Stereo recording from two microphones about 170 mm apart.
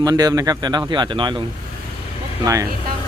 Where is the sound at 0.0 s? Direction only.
25° right (ahead or behind).